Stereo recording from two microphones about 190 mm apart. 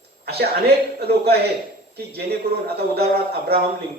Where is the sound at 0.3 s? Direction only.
60° right (ahead or behind).